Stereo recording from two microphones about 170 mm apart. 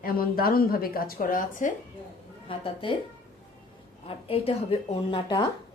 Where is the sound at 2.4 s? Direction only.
30° left (ahead or behind).